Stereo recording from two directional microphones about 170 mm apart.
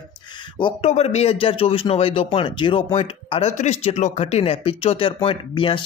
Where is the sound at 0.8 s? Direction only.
35° left (ahead or behind).